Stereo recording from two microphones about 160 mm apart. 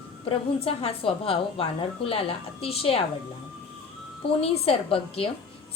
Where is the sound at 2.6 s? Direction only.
35° left (ahead or behind).